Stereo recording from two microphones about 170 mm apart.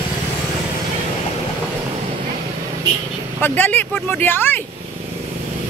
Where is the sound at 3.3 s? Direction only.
10° left (ahead or behind).